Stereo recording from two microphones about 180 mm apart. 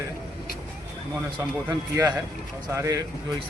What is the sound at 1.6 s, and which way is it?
Speech, 20° right (ahead or behind).